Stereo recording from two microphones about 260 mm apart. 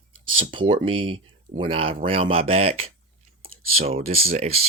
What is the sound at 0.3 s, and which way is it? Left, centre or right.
Speech, centre.